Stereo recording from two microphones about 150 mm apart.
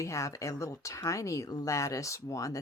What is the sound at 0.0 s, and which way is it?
Speech, 20° left (ahead or behind).